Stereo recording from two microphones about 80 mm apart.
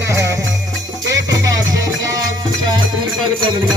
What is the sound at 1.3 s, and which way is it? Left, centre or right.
Music, right.